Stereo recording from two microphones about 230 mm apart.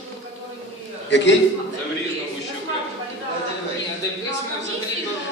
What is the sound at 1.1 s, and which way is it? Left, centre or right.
Speech, left.